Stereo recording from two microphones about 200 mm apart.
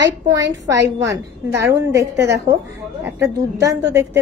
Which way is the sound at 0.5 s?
15° right (ahead or behind).